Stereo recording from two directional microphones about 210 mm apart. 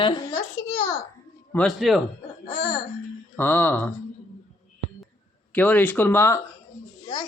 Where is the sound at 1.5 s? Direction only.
5° left (ahead or behind).